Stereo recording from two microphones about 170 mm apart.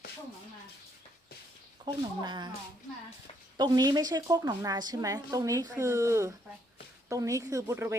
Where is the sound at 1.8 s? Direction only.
25° right (ahead or behind).